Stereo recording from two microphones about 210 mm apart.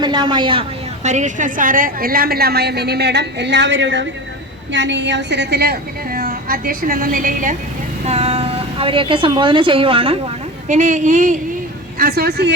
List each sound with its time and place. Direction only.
0.0 s a woman's voice: 20° right (ahead or behind)
1.0 s a woman's voice: 35° right (ahead or behind)
10.7 s a woman's voice: 35° right (ahead or behind); by 12.5 s 50° right (ahead or behind)